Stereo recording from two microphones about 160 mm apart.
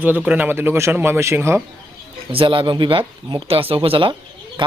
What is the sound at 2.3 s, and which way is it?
A man's voice, 35° right (ahead or behind).